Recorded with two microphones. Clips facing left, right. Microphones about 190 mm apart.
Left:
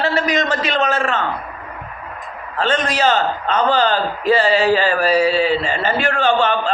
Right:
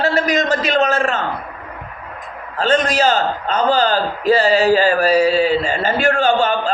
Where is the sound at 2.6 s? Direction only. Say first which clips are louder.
Right 2 dB; 40° right (ahead or behind).